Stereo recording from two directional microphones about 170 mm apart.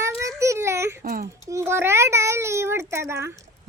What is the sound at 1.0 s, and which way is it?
Speech, 60° right (ahead or behind).